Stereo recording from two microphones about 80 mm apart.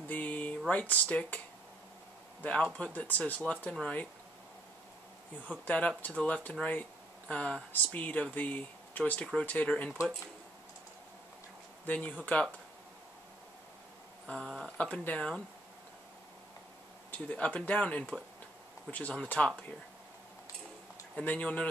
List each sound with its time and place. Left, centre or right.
0.1 s a sound: centre
0.7 s speech: centre
2.4 s speech: centre
5.5 s speech: centre
11.8 s speech: centre
14.2 s speech: centre
17.3 s speech: centre
21.1 s speech: centre